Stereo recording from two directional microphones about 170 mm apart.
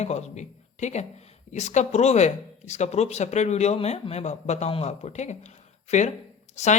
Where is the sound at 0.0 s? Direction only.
40° left (ahead or behind).